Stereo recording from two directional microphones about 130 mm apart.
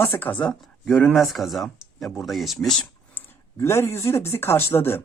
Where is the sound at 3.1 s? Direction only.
20° left (ahead or behind).